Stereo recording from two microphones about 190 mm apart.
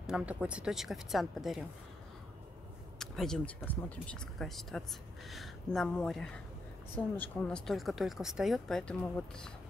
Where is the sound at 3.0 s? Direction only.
Centre (ahead or behind).